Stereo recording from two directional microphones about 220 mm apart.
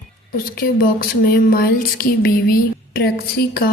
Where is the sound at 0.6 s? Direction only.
40° left (ahead or behind).